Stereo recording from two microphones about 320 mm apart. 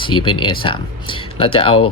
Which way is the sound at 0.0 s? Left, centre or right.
Centre.